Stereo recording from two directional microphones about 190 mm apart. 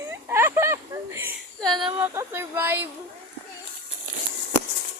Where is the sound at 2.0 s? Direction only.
10° right (ahead or behind).